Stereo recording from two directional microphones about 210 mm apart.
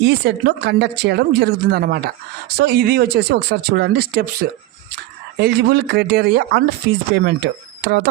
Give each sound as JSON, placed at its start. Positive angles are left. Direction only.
{"t": 0.0, "sound": "speech", "side_deg": -55}